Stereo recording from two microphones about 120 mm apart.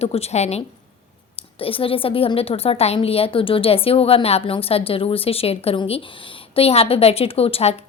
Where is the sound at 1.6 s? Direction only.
50° left (ahead or behind).